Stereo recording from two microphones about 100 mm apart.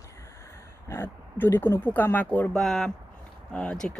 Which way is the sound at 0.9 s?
25° left (ahead or behind).